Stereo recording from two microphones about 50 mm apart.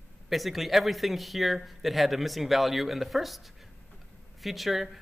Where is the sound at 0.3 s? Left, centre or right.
Centre.